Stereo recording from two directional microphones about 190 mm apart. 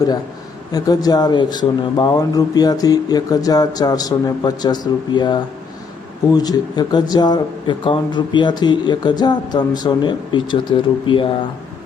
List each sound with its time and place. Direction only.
0.7 s speech: 20° left (ahead or behind)